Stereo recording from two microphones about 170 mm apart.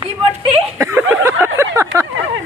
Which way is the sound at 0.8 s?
15° right (ahead or behind).